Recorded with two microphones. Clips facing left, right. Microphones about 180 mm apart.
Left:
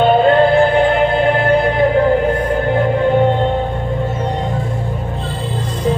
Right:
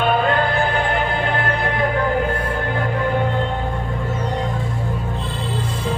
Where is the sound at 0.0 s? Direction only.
30° left (ahead or behind).